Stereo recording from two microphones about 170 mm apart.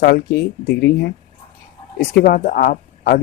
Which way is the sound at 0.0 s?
75° left (ahead or behind).